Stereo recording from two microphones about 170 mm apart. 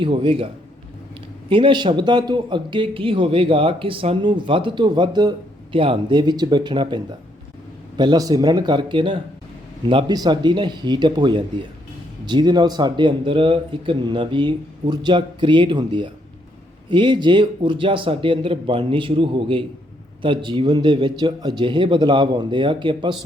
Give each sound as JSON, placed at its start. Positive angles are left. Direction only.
{"t": 0.0, "sound": "speech", "side_deg": -30}